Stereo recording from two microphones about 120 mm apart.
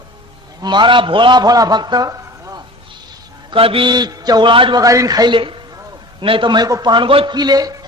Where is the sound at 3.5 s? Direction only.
50° right (ahead or behind).